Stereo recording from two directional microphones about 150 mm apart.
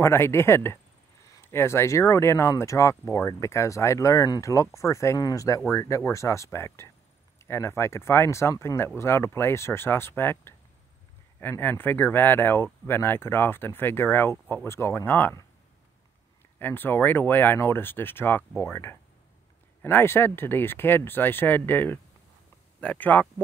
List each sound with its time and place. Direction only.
0.0 s speech: 15° left (ahead or behind)
16.5 s speech: 15° left (ahead or behind)